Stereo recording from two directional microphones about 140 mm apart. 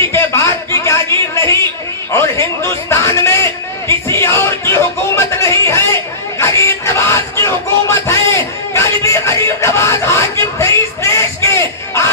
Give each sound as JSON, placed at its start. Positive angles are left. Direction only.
{"t": 0.1, "sound": "a sound", "side_deg": 20}
{"t": 2.1, "sound": "a man's voice", "side_deg": 20}
{"t": 3.8, "sound": "music", "side_deg": 20}